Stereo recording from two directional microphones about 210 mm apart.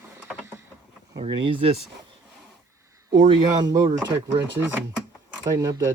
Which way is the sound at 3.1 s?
20° right (ahead or behind).